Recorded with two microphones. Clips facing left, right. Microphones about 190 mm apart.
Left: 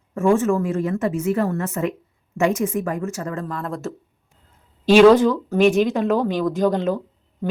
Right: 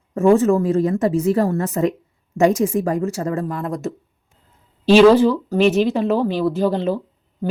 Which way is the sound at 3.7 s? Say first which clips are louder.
Right 3 dB; 15° right (ahead or behind).